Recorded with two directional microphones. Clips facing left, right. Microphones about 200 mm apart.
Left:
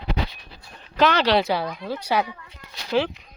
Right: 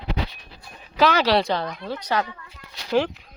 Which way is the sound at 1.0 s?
5° right (ahead or behind).